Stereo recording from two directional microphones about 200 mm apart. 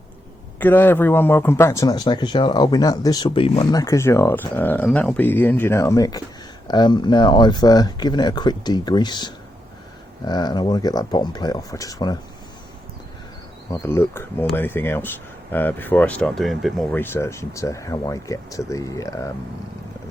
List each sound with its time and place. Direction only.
0.6 s speech: 10° left (ahead or behind)
13.7 s speech: 10° left (ahead or behind)